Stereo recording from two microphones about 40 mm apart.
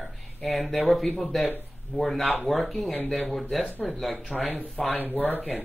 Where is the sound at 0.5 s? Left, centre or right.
Centre.